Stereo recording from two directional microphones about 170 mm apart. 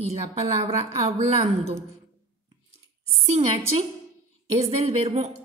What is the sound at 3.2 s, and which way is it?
Speech, 40° right (ahead or behind).